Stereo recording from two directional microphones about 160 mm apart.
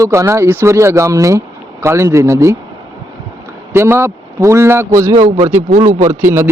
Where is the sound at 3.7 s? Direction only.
15° right (ahead or behind).